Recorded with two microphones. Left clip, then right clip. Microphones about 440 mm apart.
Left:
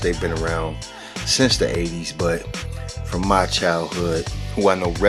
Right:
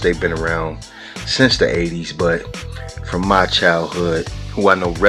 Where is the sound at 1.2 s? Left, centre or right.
Left.